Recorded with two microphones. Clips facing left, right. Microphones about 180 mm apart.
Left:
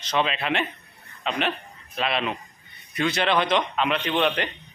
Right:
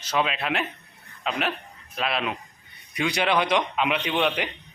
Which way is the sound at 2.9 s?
10° right (ahead or behind).